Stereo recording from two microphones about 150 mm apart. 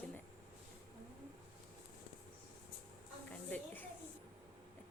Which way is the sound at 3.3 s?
10° left (ahead or behind).